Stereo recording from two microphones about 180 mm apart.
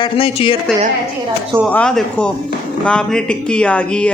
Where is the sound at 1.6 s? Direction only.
5° left (ahead or behind).